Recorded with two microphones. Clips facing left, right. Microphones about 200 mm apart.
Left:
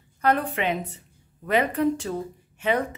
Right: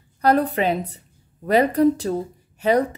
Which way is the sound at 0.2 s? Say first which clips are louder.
Right 5 dB; 35° right (ahead or behind).